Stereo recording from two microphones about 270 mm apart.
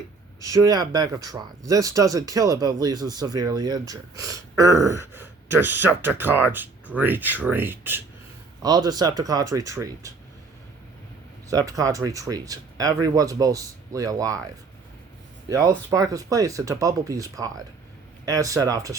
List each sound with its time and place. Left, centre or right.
0.3 s speech: centre
11.4 s speech: centre
15.4 s speech: centre